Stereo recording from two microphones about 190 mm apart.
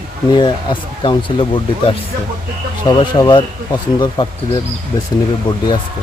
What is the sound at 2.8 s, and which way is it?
Speech, 25° left (ahead or behind).